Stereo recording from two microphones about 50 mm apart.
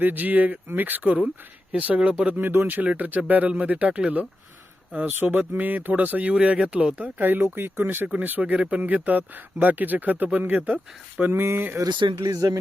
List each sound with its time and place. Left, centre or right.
0.0 s speech: right
2.8 s speech: right
6.9 s speech: right
11.3 s speech: right